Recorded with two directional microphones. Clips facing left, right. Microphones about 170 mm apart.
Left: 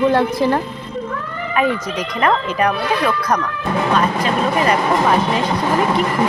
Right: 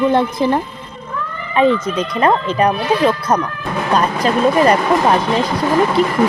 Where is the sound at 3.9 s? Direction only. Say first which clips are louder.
Right 4 dB; 40° right (ahead or behind).